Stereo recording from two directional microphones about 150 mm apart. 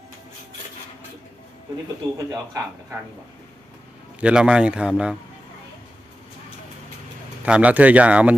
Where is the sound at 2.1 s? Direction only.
25° right (ahead or behind).